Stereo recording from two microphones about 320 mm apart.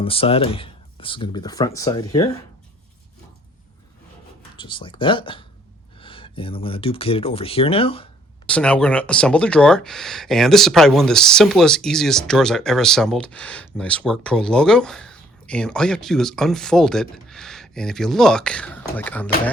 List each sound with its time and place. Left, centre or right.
0.0 s speech: centre
4.5 s speech: centre
8.4 s speech: centre